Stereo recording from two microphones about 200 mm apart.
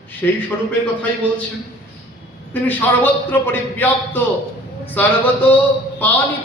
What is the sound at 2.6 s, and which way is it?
A man's voice, 10° left (ahead or behind).